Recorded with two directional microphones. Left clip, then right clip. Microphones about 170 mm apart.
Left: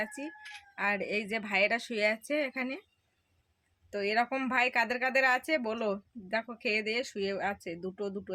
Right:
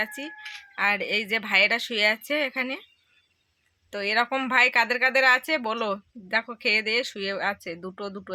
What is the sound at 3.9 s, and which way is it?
Speech, 10° right (ahead or behind).